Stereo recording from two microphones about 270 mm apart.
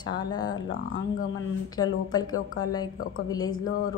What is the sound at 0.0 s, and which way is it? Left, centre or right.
Speech, centre.